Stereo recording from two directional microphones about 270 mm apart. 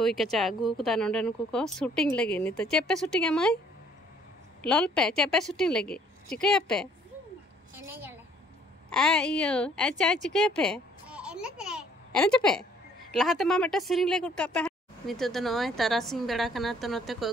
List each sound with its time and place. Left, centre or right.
0.0 s speech: centre
4.6 s speech: centre
7.7 s a sound: centre
8.9 s a woman's voice: centre